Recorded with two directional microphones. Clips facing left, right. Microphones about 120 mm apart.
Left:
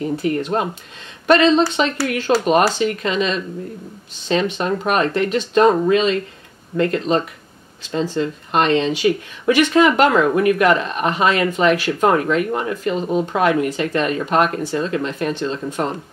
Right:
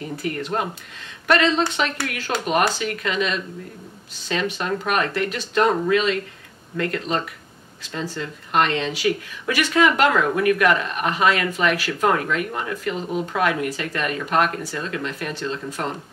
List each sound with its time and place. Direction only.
0.1 s speech: 20° left (ahead or behind)